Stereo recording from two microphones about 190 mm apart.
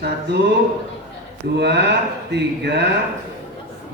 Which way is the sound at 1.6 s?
65° right (ahead or behind).